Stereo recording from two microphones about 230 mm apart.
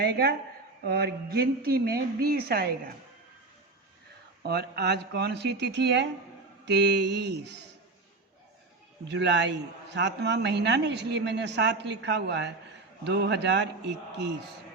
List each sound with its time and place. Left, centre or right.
0.0 s a man's voice: right
4.4 s a man's voice: right
9.0 s a man's voice: right